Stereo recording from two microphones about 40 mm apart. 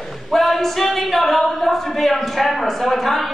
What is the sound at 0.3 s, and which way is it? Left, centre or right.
Speech, centre.